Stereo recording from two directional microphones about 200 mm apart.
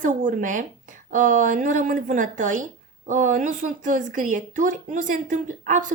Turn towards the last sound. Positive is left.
turn(degrees=-40)  # may be behind; listen again after turning